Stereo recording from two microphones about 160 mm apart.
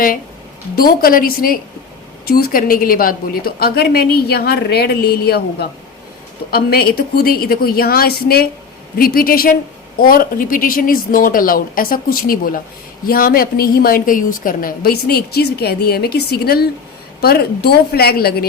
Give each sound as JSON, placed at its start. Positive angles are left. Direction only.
{"t": 0.8, "sound": "a woman's voice", "side_deg": 65}
{"t": 17.2, "sound": "a woman's voice", "side_deg": 85}